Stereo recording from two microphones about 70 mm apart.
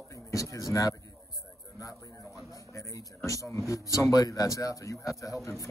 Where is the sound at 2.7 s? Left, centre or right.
Left.